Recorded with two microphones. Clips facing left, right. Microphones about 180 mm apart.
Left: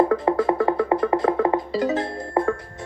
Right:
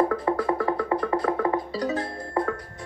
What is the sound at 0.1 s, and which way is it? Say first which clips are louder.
Music: left 4 dB; 25° left (ahead or behind).